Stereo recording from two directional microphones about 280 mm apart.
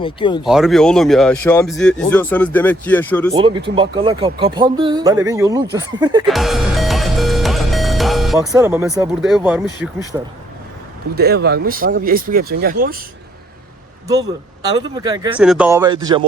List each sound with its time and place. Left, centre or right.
0.0 s speech: centre
0.4 s speech: centre
3.3 s speech: centre
6.2 s music: centre
8.4 s speech: centre
11.1 s speech: right
14.6 s speech: centre